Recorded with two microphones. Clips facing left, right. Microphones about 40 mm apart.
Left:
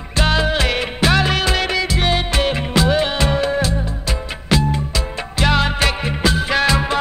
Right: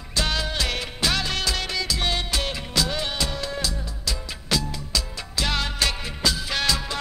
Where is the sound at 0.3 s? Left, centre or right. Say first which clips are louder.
Left 9 dB; left.